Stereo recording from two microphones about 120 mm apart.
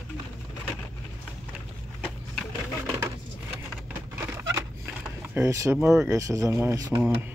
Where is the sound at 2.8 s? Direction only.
20° right (ahead or behind).